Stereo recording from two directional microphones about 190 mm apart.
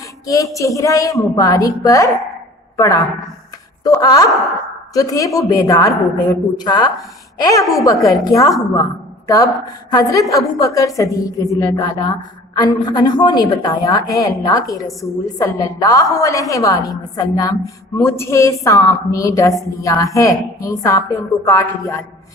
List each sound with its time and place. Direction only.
0.5 s a woman's voice: 15° left (ahead or behind)
7.6 s a woman's voice: centre (ahead or behind)
7.9 s a woman's voice: 20° left (ahead or behind)